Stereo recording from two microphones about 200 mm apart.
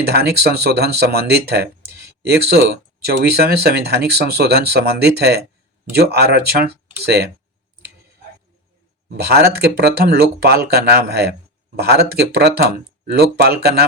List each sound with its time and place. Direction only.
0.0 s speech: 55° right (ahead or behind)
9.0 s speech: 55° right (ahead or behind)